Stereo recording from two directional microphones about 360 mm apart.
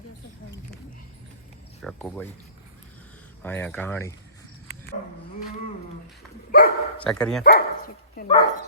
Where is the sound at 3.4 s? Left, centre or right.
Centre.